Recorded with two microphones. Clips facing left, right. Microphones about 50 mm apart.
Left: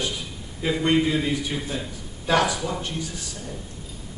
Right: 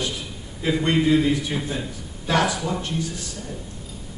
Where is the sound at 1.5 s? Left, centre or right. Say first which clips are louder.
Right 2 dB; centre.